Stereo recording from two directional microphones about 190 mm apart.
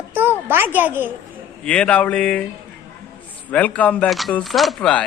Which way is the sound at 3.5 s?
5° left (ahead or behind).